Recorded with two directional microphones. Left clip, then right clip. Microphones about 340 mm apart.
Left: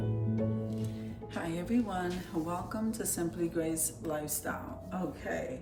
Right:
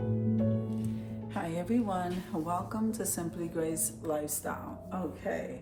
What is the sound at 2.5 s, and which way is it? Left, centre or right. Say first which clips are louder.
Speech: right 3 dB; centre.